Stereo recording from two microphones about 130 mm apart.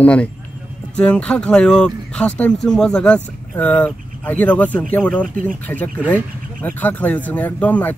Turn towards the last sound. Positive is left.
turn(degrees=10)  # may be behind; listen again after turning